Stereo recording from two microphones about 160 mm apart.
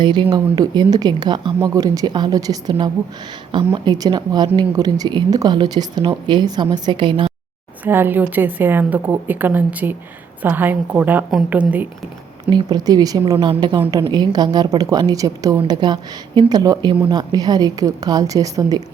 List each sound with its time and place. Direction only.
0.0 s speech: 30° right (ahead or behind)
7.9 s a woman's voice: 15° right (ahead or behind)
12.5 s speech: 25° right (ahead or behind)